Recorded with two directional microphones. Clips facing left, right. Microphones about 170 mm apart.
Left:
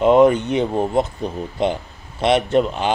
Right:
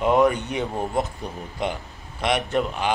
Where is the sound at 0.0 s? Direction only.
25° left (ahead or behind).